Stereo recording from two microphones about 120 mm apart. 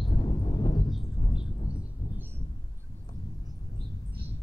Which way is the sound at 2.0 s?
40° left (ahead or behind).